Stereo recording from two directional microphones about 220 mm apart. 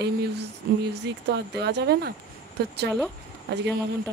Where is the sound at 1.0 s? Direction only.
50° right (ahead or behind).